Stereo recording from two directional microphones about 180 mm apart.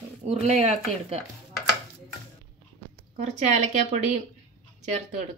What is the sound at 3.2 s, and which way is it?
Speech, 40° right (ahead or behind).